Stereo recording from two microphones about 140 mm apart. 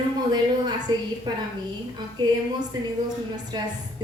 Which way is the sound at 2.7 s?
30° right (ahead or behind).